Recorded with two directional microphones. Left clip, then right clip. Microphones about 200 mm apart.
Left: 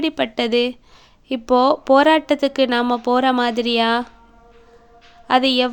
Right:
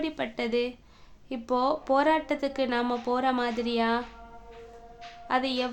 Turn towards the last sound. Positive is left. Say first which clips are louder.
# left 11 dB
turn(degrees=40)  # may be behind; listen again after turning